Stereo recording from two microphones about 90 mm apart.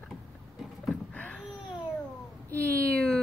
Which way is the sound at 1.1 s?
15° left (ahead or behind).